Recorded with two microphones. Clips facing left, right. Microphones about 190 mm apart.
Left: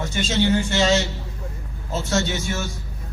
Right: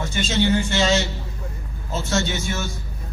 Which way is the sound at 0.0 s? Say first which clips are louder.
Even; 40° left (ahead or behind).